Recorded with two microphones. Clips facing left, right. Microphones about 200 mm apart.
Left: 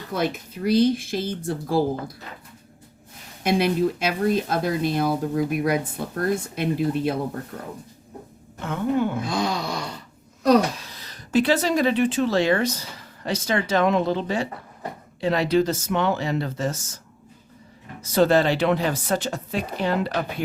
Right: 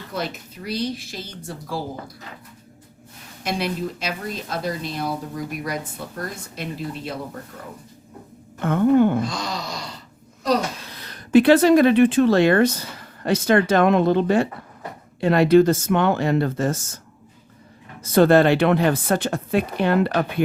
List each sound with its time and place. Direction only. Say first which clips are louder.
0.1 s speech: left 4 dB; 55° left (ahead or behind)
3.4 s speech: left 5 dB; 55° left (ahead or behind)
5.6 s a sound: left 6 dB; 55° left (ahead or behind)
8.5 s speech: right 7 dB; 55° right (ahead or behind)
9.2 s a sound: left 3 dB; 55° left (ahead or behind)
10.8 s speech: right 3 dB; 60° right (ahead or behind)
18.0 s speech: right 4 dB; 55° right (ahead or behind)